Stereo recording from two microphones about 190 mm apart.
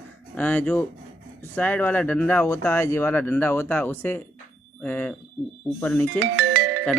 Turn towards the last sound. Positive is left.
turn(degrees=-65)  # may be behind; listen again after turning